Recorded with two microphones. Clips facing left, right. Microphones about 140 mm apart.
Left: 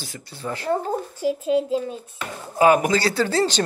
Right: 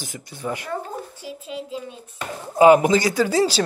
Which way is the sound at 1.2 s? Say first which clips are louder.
Left 12 dB; 45° left (ahead or behind).